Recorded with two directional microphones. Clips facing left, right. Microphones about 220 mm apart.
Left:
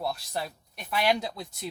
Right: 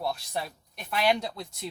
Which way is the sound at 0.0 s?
Centre (ahead or behind).